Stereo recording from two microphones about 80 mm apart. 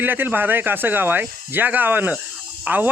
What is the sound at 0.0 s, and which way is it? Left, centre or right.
A man's voice, right.